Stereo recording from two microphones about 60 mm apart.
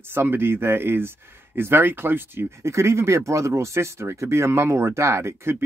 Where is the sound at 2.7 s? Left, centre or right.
Right.